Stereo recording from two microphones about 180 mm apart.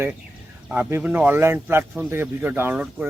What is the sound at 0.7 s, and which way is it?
Speech, 10° right (ahead or behind).